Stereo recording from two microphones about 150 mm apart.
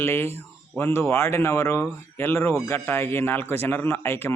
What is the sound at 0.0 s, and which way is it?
Speech, 15° left (ahead or behind).